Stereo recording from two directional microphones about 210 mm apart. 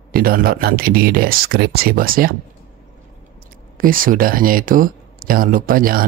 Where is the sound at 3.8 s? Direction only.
40° right (ahead or behind).